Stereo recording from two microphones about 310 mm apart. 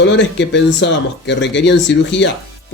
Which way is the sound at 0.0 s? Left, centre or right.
Left.